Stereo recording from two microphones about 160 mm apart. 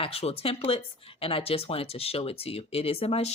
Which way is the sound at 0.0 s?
40° left (ahead or behind).